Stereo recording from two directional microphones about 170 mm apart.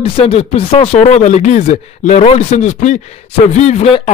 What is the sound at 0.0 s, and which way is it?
Speech, 35° left (ahead or behind).